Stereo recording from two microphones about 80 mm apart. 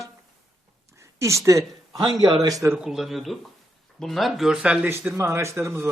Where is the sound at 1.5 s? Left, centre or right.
Right.